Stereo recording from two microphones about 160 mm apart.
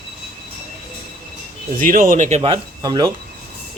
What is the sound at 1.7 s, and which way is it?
Speech, 60° right (ahead or behind).